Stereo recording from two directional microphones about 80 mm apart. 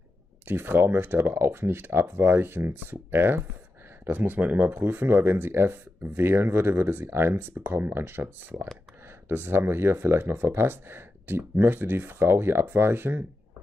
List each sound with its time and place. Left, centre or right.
0.5 s speech: right